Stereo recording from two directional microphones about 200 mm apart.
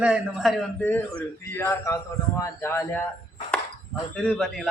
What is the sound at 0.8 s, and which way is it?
Speech, 10° left (ahead or behind).